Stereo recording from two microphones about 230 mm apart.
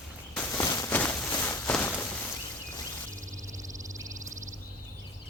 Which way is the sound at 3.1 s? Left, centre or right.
Right.